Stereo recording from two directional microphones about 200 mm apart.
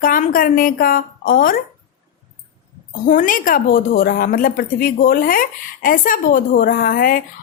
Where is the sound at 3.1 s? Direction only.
40° left (ahead or behind).